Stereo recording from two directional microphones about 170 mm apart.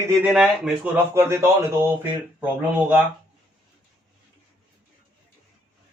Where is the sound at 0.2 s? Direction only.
5° right (ahead or behind).